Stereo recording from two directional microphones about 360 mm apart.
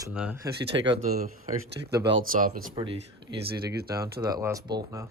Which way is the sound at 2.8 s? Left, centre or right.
Centre.